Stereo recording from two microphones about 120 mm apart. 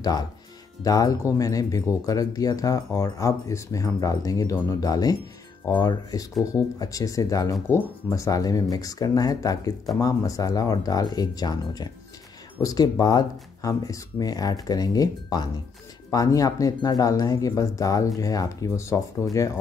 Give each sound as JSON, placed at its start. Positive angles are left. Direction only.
{"t": 0.0, "sound": "speech", "side_deg": 35}